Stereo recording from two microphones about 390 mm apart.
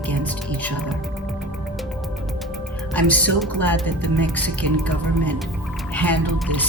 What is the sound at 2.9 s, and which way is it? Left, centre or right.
Speech, centre.